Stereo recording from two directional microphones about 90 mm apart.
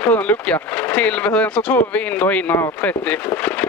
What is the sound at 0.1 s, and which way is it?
Speech, 20° left (ahead or behind).